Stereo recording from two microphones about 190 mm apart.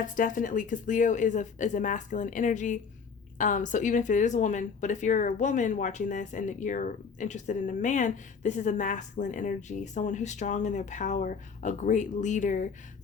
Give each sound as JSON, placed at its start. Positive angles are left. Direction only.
{"t": 0.2, "sound": "speech", "side_deg": 45}